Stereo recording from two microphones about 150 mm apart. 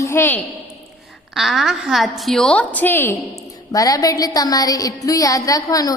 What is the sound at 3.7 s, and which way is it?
A woman's voice, 25° left (ahead or behind).